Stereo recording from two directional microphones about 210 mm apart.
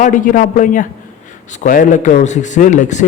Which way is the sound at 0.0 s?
40° left (ahead or behind).